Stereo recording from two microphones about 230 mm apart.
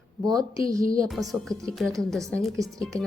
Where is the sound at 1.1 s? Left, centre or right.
Centre.